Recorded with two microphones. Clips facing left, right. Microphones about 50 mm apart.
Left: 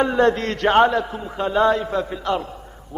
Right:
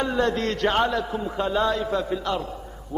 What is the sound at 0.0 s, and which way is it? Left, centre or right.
A man's voice, left.